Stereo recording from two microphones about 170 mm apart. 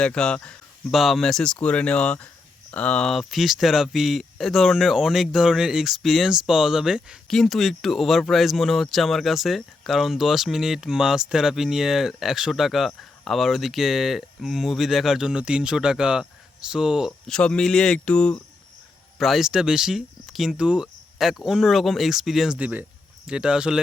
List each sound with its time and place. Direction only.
0.0 s speech: 5° left (ahead or behind)